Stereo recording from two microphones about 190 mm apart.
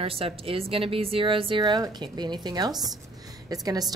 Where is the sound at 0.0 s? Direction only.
30° right (ahead or behind).